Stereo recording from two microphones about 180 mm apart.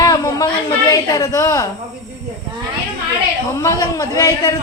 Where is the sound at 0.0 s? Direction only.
20° left (ahead or behind).